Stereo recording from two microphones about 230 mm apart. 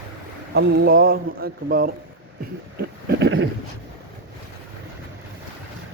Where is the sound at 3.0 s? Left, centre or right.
Right.